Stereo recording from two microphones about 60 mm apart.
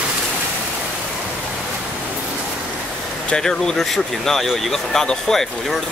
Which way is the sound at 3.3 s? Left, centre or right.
Centre.